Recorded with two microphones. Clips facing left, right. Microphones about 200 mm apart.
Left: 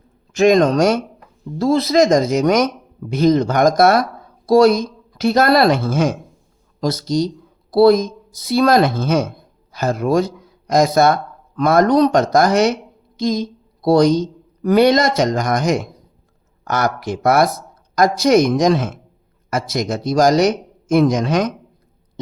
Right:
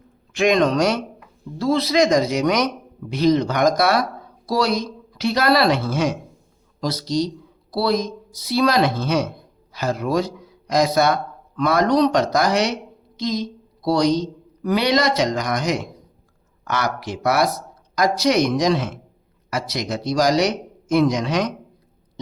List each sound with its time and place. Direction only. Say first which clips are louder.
0.3 s a woman's voice: left 5 dB; 45° left (ahead or behind)